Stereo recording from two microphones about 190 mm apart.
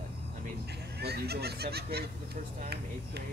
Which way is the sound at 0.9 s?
60° right (ahead or behind).